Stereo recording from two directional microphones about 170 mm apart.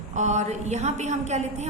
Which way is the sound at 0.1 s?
45° right (ahead or behind).